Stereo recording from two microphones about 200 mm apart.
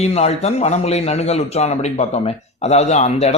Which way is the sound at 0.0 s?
30° left (ahead or behind).